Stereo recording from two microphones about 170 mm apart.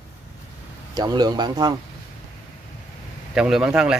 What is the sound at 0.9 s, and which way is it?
Speech, 25° right (ahead or behind).